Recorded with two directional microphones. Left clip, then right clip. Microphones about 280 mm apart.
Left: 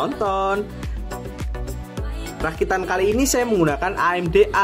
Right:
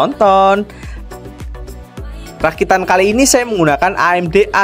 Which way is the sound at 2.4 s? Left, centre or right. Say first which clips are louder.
Right 9 dB; right.